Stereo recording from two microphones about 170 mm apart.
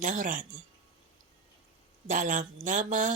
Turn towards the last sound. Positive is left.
turn(degrees=-50)  # may be behind; listen again after turning